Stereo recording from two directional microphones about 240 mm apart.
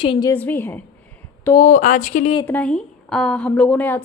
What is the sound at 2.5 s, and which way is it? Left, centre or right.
A woman's voice, centre.